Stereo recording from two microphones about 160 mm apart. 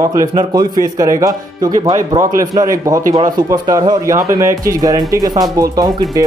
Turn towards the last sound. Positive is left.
turn(degrees=-20)  # may be behind; listen again after turning